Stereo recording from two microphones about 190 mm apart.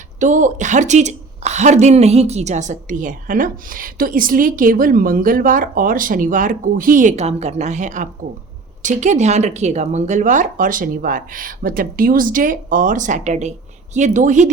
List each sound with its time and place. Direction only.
0.2 s a woman's voice: 40° right (ahead or behind)